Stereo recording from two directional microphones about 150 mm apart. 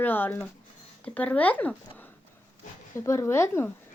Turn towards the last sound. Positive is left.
turn(degrees=15)  # may be behind; listen again after turning